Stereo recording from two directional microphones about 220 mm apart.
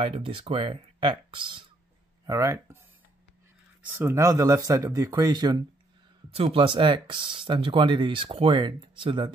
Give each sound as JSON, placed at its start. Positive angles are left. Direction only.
{"t": 0.0, "sound": "speech", "side_deg": -25}
{"t": 3.8, "sound": "speech", "side_deg": -10}